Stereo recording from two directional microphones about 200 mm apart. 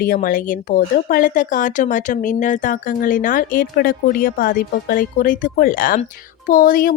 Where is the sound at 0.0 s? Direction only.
45° left (ahead or behind).